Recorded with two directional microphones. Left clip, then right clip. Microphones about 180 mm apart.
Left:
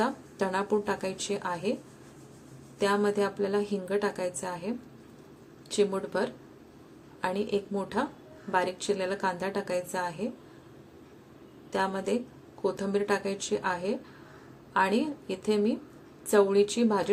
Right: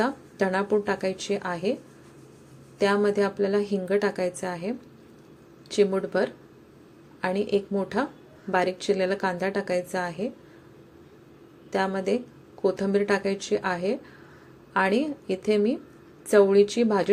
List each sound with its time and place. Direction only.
0.0 s a woman's voice: 15° right (ahead or behind)
2.7 s a woman's voice: 15° right (ahead or behind)
5.7 s a woman's voice: 15° right (ahead or behind)
11.7 s a woman's voice: 15° right (ahead or behind)